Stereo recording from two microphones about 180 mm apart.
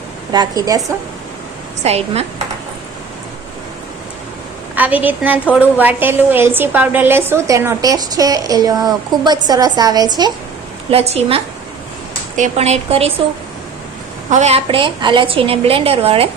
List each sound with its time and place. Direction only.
0.3 s a woman's voice: 20° right (ahead or behind)
1.8 s a woman's voice: 35° right (ahead or behind)
4.7 s a woman's voice: 10° right (ahead or behind)
10.9 s a woman's voice: 35° right (ahead or behind)
14.3 s a woman's voice: 40° right (ahead or behind)